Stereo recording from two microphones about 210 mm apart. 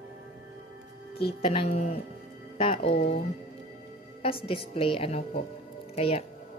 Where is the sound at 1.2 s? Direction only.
25° left (ahead or behind).